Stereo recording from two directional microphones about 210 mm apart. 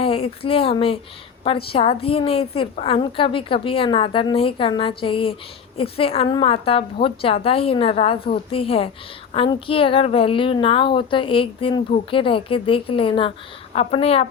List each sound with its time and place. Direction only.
0.0 s a woman's voice: 25° left (ahead or behind)